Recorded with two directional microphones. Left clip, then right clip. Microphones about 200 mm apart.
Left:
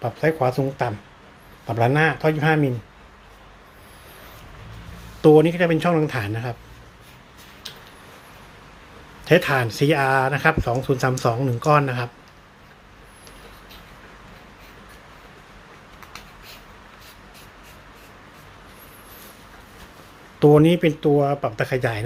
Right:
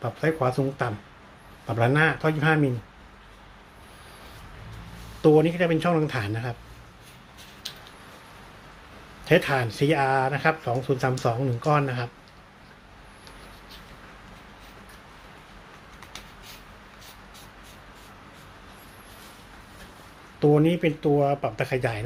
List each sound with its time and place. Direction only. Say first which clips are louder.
0.0 s a man's voice: left 4 dB; 5° left (ahead or behind)
5.2 s speech: left 5 dB; 15° left (ahead or behind)
9.2 s speech: left 4 dB; 10° left (ahead or behind)
20.4 s speech: left 6 dB; 25° left (ahead or behind)